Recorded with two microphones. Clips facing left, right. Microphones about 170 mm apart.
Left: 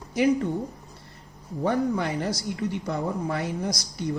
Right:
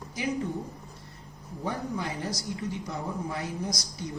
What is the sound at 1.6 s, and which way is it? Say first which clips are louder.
A man's voice: left 8 dB; 65° left (ahead or behind).